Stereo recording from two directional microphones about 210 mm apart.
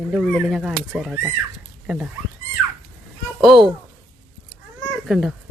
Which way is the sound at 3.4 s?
Centre (ahead or behind).